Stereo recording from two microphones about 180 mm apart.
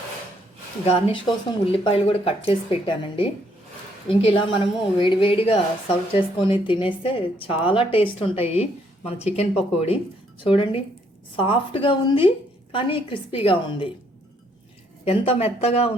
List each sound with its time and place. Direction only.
1.6 s a woman's voice: 30° left (ahead or behind)
15.0 s a woman's voice: 30° left (ahead or behind)